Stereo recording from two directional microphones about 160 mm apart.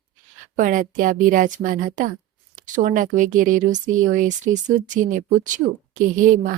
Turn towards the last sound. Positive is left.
turn(degrees=-55)  # may be behind; listen again after turning